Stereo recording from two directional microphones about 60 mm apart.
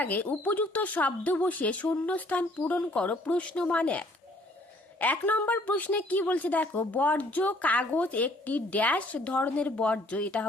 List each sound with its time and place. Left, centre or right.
0.0 s a woman's voice: left